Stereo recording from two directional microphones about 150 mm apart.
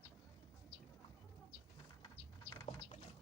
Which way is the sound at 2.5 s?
20° left (ahead or behind).